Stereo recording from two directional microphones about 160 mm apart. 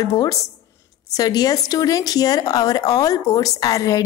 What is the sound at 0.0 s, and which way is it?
A woman's voice, 20° left (ahead or behind).